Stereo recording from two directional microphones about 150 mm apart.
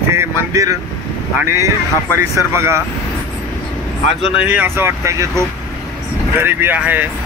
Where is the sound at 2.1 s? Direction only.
20° right (ahead or behind).